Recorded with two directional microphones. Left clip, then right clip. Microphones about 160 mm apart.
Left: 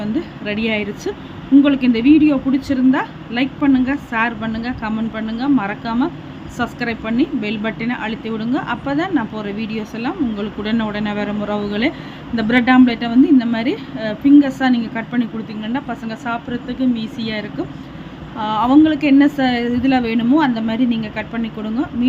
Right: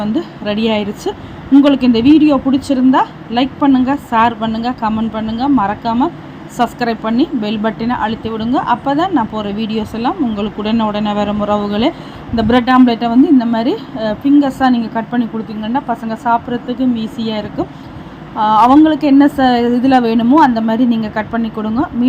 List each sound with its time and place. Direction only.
0.0 s a woman's voice: 15° right (ahead or behind)